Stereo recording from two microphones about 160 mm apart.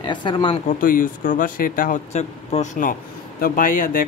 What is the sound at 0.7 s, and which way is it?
Speech, 60° left (ahead or behind).